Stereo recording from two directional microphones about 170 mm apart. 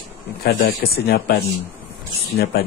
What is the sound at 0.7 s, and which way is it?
Speech, 70° left (ahead or behind).